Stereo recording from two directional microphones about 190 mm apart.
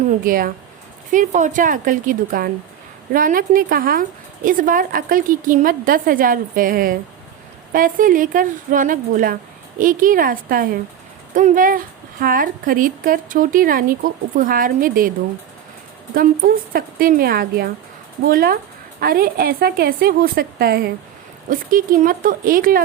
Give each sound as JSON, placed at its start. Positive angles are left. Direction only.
{"t": 0.1, "sound": "speech", "side_deg": -50}
{"t": 16.1, "sound": "speech", "side_deg": -50}